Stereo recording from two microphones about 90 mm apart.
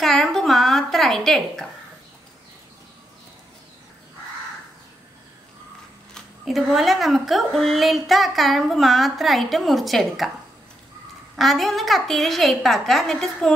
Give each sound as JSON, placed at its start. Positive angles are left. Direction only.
{"t": 0.0, "sound": "a sound", "side_deg": 0}
{"t": 6.1, "sound": "a woman's voice", "side_deg": 0}
{"t": 11.3, "sound": "a woman's voice", "side_deg": 0}